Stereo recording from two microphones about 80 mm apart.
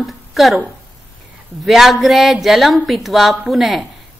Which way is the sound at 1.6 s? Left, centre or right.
Centre.